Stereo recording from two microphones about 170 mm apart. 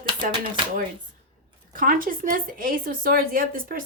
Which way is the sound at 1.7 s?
55° right (ahead or behind).